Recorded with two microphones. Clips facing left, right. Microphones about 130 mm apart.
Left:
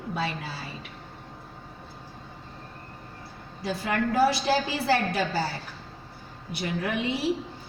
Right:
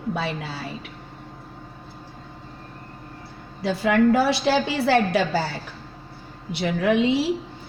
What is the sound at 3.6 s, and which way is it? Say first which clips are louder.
A woman's voice: right 9 dB; 90° right.